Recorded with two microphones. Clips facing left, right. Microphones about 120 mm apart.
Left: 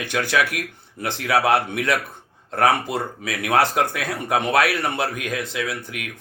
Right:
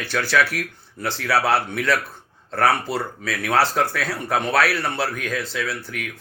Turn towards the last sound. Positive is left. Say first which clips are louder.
# even
turn(degrees=15)  # may be behind; listen again after turning